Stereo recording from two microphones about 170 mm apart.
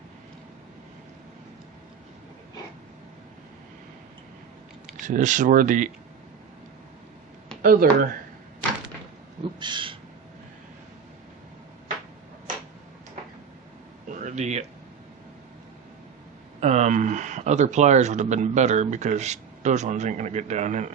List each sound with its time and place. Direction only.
4.9 s speech: 45° right (ahead or behind)
7.6 s speech: 60° right (ahead or behind)
9.4 s owl: 25° right (ahead or behind)
14.1 s a sound: 45° right (ahead or behind)
16.6 s speech: 40° right (ahead or behind)